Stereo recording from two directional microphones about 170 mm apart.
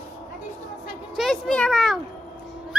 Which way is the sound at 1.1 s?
Centre (ahead or behind).